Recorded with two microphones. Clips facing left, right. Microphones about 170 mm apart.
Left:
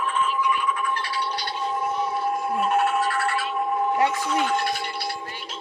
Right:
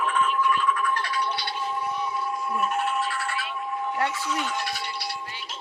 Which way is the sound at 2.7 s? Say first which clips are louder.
Left 5 dB; 65° left (ahead or behind).